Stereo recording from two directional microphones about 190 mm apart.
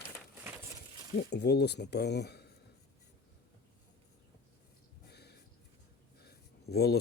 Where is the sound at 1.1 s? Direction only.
60° left (ahead or behind).